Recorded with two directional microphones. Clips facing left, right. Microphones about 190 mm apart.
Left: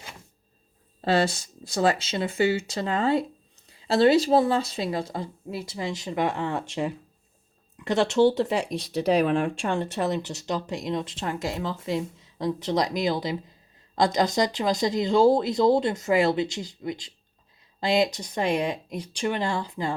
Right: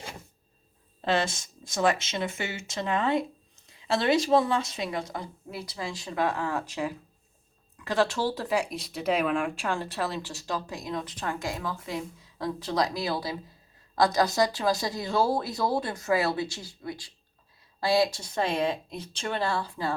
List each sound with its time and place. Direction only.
1.0 s speech: 35° left (ahead or behind); by 19.9 s 20° left (ahead or behind)